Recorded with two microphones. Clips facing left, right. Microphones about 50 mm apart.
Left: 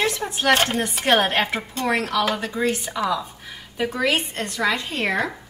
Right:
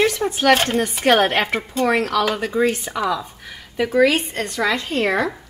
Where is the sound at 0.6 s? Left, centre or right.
Centre.